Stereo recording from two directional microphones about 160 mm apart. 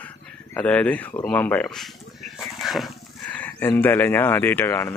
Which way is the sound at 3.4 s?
10° left (ahead or behind).